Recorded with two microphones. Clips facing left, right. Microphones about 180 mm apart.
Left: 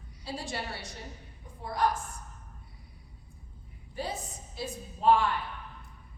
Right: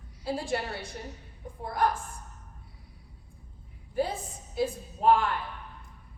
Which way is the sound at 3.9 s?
55° right (ahead or behind).